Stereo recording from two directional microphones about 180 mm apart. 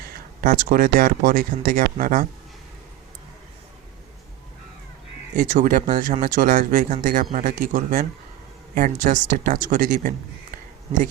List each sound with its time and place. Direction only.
0.0 s speech: 55° right (ahead or behind)
5.4 s speech: 45° right (ahead or behind)